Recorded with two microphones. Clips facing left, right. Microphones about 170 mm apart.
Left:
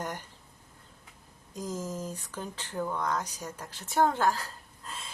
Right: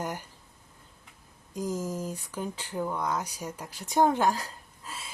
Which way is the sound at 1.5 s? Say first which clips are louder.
Right 4 dB; 10° right (ahead or behind).